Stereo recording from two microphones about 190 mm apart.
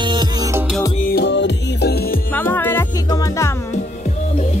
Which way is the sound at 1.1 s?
65° left (ahead or behind).